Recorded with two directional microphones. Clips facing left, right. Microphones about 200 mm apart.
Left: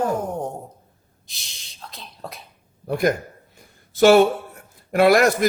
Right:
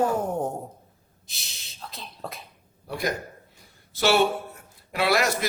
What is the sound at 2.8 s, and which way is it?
Speech, 50° left (ahead or behind).